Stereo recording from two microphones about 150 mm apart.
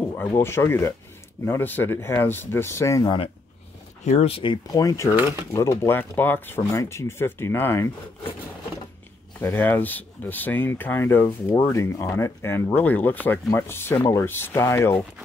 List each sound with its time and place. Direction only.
0.1 s speech: 15° left (ahead or behind)
4.0 s speech: 45° left (ahead or behind); by 7.9 s 15° left (ahead or behind)
9.4 s speech: 15° left (ahead or behind)